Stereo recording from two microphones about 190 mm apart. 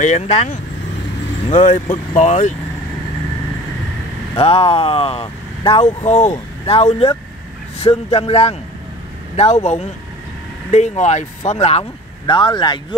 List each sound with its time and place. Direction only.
0.0 s speech: 35° left (ahead or behind)
4.4 s speech: 30° left (ahead or behind)
6.2 s vehicle: 20° left (ahead or behind)
6.7 s speech: 35° left (ahead or behind)
12.3 s speech: 25° left (ahead or behind)